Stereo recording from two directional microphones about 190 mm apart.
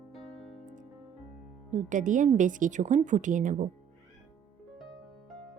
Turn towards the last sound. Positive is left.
turn(degrees=-40)  # may be behind; listen again after turning